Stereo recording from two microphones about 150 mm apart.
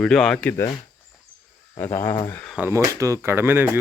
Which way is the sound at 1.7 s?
15° left (ahead or behind).